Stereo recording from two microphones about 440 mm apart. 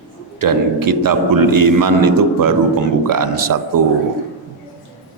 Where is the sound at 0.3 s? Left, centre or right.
Right.